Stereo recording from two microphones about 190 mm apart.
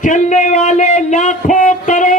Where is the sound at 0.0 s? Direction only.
40° left (ahead or behind).